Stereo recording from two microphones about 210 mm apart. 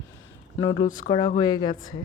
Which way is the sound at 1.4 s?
20° left (ahead or behind).